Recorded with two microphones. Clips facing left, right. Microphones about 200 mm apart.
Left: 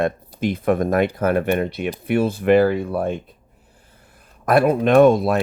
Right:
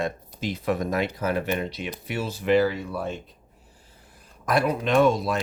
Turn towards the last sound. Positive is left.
turn(degrees=55)  # may be behind; listen again after turning